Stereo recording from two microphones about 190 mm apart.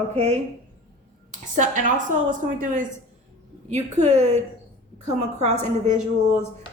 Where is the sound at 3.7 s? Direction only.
35° right (ahead or behind).